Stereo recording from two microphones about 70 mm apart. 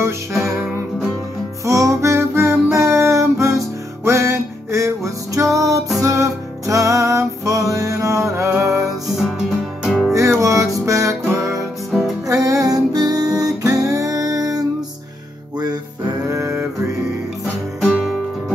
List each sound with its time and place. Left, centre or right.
0.0 s music: right
1.7 s music: right
9.1 s music: centre
10.4 s music: right
13.8 s music: right